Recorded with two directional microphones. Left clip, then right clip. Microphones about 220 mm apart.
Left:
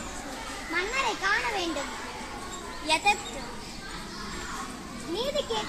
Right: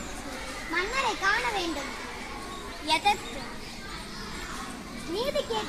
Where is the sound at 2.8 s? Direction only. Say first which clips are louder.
Even; 10° left (ahead or behind).